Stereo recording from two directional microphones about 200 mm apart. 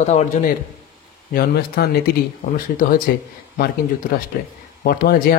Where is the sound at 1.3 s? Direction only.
50° left (ahead or behind).